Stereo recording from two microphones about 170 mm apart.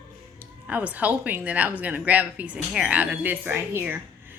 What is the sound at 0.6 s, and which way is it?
Speech, 10° right (ahead or behind).